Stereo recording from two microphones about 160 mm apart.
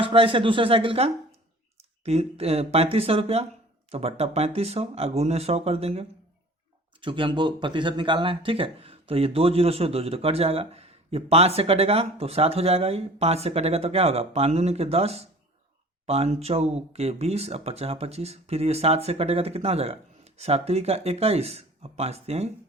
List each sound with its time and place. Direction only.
0.0 s speech: 35° right (ahead or behind)